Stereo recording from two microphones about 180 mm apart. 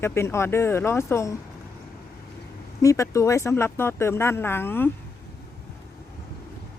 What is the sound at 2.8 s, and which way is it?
Speech, 15° left (ahead or behind).